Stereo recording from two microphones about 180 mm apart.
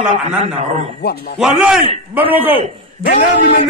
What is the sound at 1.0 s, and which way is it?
Speech, 65° left (ahead or behind).